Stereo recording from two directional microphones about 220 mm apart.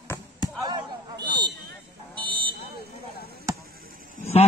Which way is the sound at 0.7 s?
20° right (ahead or behind).